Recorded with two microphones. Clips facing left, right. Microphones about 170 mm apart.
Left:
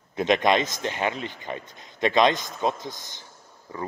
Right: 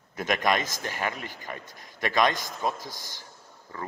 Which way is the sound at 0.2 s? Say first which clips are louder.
Left 5 dB; 25° left (ahead or behind).